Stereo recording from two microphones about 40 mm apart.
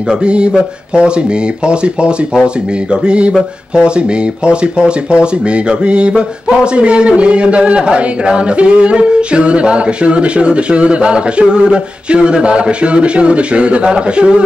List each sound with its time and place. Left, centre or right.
0.2 s speech: right